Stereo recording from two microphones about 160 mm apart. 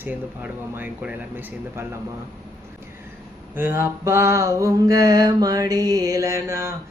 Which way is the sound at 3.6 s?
15° right (ahead or behind).